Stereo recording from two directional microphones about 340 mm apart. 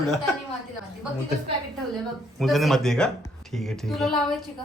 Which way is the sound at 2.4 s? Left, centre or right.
Centre.